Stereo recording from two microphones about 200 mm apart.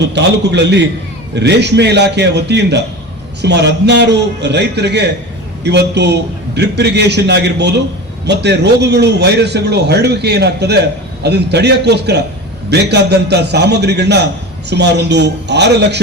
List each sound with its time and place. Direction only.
0.0 s a man's voice: 60° right (ahead or behind)